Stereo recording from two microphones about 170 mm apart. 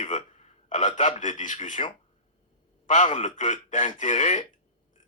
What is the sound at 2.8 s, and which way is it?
A man's voice, 45° left (ahead or behind).